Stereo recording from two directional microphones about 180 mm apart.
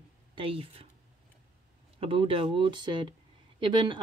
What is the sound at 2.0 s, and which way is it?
Speech, 30° right (ahead or behind).